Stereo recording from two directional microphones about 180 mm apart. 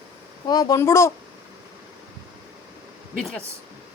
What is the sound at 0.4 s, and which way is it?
Speech, 20° left (ahead or behind).